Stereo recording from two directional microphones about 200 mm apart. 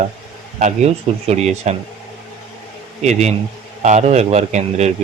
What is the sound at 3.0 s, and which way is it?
Speech, 35° right (ahead or behind).